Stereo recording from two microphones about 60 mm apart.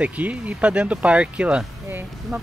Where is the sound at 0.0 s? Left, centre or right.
Right.